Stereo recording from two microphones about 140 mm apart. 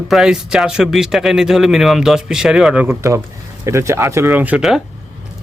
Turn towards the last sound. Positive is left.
turn(degrees=-5)  # may be behind; listen again after turning